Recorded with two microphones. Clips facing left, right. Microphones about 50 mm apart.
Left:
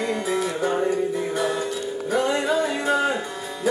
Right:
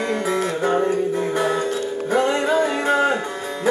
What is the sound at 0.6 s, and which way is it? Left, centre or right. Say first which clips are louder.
Music: right 4 dB; right.